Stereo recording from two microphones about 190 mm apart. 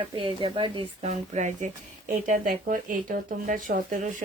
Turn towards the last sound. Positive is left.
turn(degrees=-45)  # may be behind; listen again after turning